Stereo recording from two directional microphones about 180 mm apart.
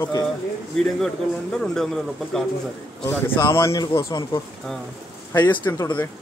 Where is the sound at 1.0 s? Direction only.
Centre (ahead or behind).